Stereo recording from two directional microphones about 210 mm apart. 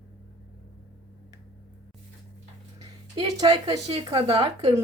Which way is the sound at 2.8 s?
20° right (ahead or behind).